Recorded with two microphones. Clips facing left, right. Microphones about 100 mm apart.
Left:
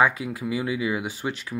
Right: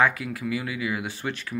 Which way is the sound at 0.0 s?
20° left (ahead or behind).